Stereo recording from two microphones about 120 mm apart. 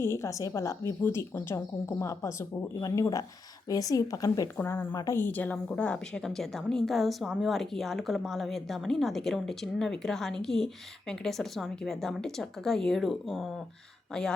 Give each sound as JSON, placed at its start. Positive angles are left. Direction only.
{"t": 0.0, "sound": "speech", "side_deg": 25}
{"t": 4.5, "sound": "a woman's voice", "side_deg": 15}